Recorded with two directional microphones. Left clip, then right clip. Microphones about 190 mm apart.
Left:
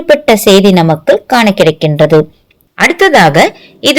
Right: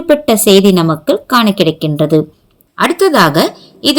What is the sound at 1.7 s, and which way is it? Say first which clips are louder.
Speech: left 5 dB; 15° left (ahead or behind).